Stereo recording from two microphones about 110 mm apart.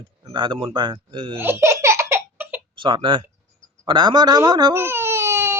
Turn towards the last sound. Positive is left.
turn(degrees=-25)  # may be behind; listen again after turning